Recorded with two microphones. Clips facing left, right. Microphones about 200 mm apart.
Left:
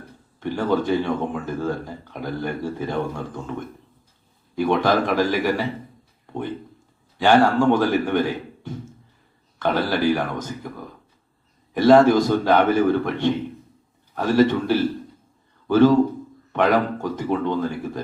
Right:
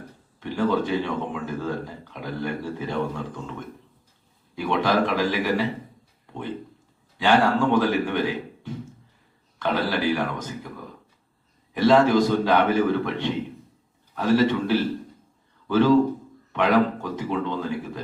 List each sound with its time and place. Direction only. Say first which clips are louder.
0.3 s a man's voice: left 1 dB; 50° left (ahead or behind)
4.5 s a man's voice: left 3 dB; 45° left (ahead or behind)
7.2 s a man's voice: left 3 dB; 50° left (ahead or behind)
9.6 s a man's voice: left 3 dB; 50° left (ahead or behind)
11.7 s a man's voice: left 4 dB; 45° left (ahead or behind)